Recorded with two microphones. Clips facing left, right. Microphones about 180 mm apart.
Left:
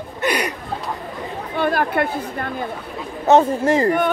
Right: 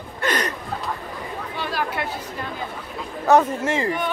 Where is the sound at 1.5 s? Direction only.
55° left (ahead or behind).